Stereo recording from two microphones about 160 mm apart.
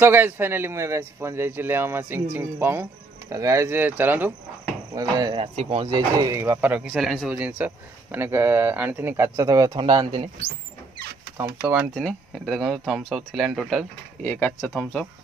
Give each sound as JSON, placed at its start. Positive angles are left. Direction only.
{"t": 0.0, "sound": "speech", "side_deg": -15}
{"t": 4.9, "sound": "speech", "side_deg": -25}
{"t": 5.9, "sound": "speech", "side_deg": -25}
{"t": 11.3, "sound": "speech", "side_deg": -20}
{"t": 11.9, "sound": "speech", "side_deg": 5}
{"t": 14.2, "sound": "speech", "side_deg": 10}